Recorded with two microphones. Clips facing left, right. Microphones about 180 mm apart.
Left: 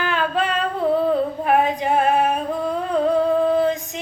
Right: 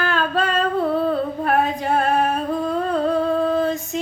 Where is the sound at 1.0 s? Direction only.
10° left (ahead or behind).